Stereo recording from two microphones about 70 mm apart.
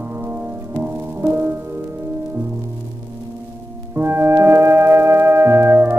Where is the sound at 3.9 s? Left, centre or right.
Right.